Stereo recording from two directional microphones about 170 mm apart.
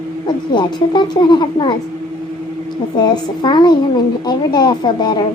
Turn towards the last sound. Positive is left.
turn(degrees=25)  # may be behind; listen again after turning